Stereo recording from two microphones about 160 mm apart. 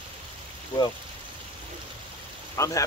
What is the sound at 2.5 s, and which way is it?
Speech, 20° left (ahead or behind).